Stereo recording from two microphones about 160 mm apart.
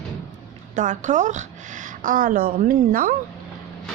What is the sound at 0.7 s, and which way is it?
A woman's voice, 50° right (ahead or behind).